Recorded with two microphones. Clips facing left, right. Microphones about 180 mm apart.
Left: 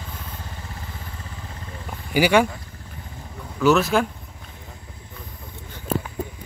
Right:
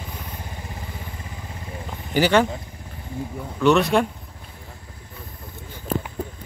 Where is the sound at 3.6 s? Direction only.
Centre (ahead or behind).